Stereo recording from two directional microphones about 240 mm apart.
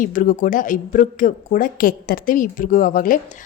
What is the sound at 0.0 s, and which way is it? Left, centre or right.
A woman's voice, left.